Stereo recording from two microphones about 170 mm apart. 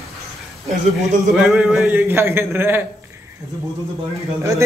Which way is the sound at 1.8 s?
10° right (ahead or behind).